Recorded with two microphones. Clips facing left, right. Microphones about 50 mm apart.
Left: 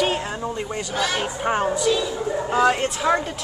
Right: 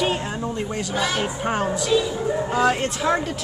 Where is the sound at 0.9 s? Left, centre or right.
Centre.